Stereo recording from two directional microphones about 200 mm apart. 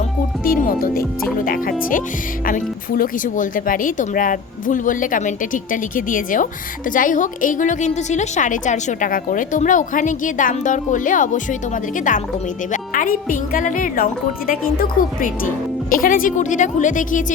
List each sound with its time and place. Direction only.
0.4 s a woman's voice: 45° left (ahead or behind)